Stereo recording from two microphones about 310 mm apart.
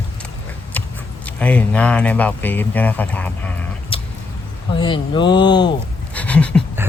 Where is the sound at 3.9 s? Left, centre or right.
Centre.